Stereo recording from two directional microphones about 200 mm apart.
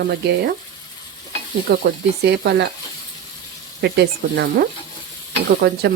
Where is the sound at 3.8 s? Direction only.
55° right (ahead or behind).